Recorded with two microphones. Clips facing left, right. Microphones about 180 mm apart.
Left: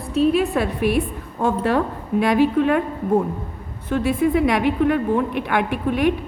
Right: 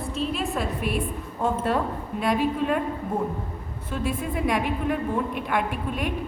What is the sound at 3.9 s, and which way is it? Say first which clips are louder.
A woman's voice: left 10 dB; 75° left (ahead or behind).